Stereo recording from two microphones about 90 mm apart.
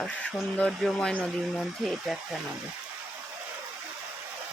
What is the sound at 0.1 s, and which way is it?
Speech, 15° left (ahead or behind).